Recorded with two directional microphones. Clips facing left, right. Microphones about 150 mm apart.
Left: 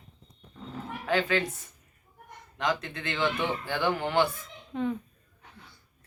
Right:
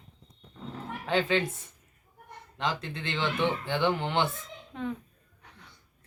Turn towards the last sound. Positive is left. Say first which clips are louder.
# left 4 dB
turn(degrees=0)  # may be behind; listen again after turning